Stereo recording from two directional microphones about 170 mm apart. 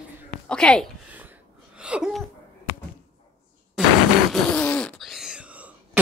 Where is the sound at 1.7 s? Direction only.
5° right (ahead or behind).